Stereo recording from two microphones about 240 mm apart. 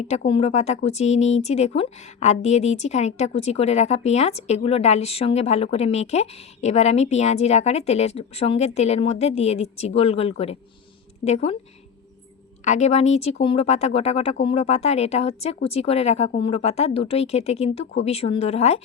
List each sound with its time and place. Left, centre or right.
0.3 s speech: left
12.6 s speech: left